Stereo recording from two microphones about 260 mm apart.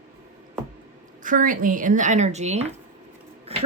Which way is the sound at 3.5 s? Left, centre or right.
Right.